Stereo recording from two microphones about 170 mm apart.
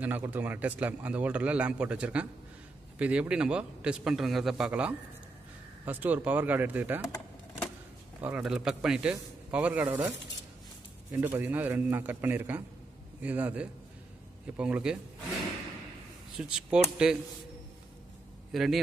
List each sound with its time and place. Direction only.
0.0 s a man's voice: 10° right (ahead or behind)
8.2 s a man's voice: 5° right (ahead or behind)
16.3 s a man's voice: 5° right (ahead or behind)
18.5 s a man's voice: centre (ahead or behind)